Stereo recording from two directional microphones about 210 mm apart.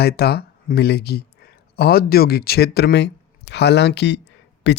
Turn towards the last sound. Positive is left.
turn(degrees=55)  # may be behind; listen again after turning